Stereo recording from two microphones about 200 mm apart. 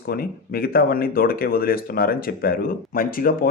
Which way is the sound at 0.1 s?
50° left (ahead or behind).